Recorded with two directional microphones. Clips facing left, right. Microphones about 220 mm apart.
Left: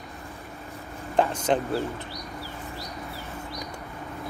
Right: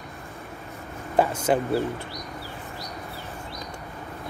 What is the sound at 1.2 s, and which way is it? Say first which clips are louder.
Speech: right 2 dB; 10° right (ahead or behind).